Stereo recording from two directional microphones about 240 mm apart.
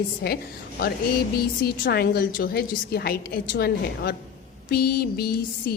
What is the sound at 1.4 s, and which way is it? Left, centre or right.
A woman's voice, left.